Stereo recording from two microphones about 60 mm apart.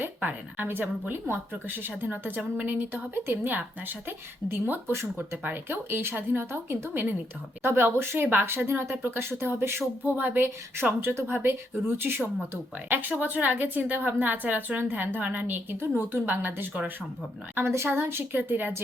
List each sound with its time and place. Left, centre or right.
0.0 s a woman's voice: right
10.0 s a woman's voice: right
17.5 s a woman's voice: right